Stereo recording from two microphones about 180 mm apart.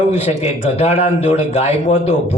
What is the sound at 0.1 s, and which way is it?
A man's voice, 35° left (ahead or behind).